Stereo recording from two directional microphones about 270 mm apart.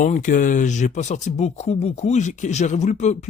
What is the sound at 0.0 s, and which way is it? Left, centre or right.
Speech, left.